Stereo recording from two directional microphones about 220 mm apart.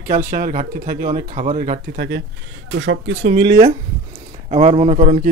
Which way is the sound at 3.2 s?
25° right (ahead or behind).